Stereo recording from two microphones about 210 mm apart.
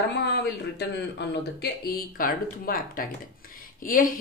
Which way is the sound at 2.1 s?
45° left (ahead or behind).